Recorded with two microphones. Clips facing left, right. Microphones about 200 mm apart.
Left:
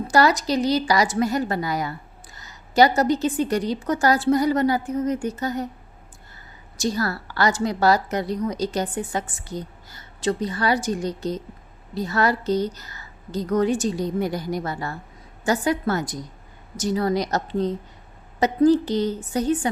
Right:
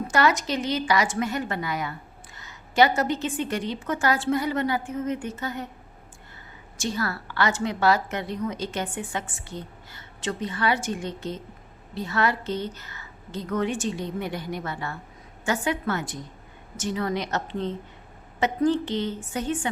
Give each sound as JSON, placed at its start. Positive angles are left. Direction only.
{"t": 0.1, "sound": "a woman's voice", "side_deg": 35}
{"t": 6.7, "sound": "a woman's voice", "side_deg": 40}